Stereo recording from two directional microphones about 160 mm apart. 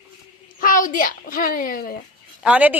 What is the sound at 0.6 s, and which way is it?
A child's voice, 55° left (ahead or behind).